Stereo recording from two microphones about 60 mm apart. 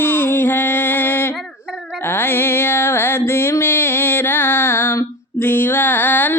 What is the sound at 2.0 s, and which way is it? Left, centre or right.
Music, left.